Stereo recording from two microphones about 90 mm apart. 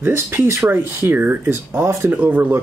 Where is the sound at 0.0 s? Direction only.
25° right (ahead or behind).